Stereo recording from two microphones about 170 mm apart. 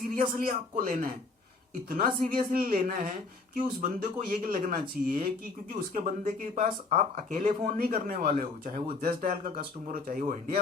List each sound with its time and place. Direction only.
0.1 s speech: 55° right (ahead or behind)